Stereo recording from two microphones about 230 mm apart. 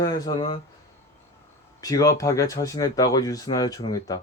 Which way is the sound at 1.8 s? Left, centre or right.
Centre.